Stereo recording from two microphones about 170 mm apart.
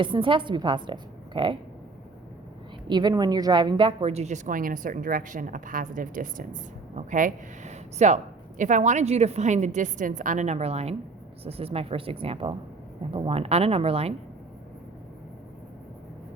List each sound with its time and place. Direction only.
0.0 s a woman's voice: 30° right (ahead or behind)
2.8 s a woman's voice: 25° right (ahead or behind)